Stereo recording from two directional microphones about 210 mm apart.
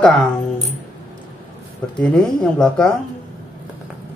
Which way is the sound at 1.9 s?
5° left (ahead or behind).